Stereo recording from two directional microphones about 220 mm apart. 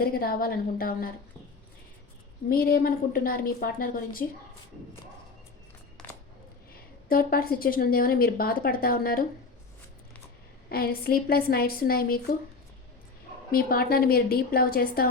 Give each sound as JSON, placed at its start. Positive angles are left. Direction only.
{"t": 0.0, "sound": "a woman's voice", "side_deg": 40}
{"t": 2.5, "sound": "a woman's voice", "side_deg": 40}
{"t": 6.0, "sound": "a sound", "side_deg": 10}
{"t": 7.1, "sound": "a woman's voice", "side_deg": 40}
{"t": 10.7, "sound": "a woman's voice", "side_deg": 45}
{"t": 13.5, "sound": "a woman's voice", "side_deg": 40}